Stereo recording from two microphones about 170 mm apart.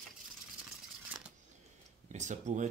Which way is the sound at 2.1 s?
45° right (ahead or behind).